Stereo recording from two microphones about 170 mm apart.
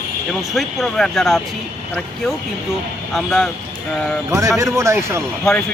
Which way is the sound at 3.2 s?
5° left (ahead or behind).